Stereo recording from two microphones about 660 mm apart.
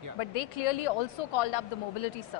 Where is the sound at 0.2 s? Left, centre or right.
Left.